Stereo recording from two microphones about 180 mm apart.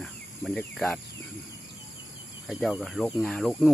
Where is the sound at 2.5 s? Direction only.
Centre (ahead or behind).